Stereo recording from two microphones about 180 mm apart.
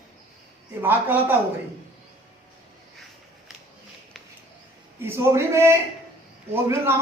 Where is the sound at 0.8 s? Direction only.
10° right (ahead or behind).